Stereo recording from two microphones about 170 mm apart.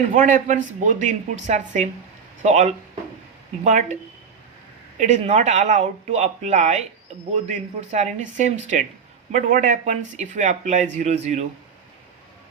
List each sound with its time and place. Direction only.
0.1 s speech: 50° right (ahead or behind)
4.9 s speech: 45° right (ahead or behind)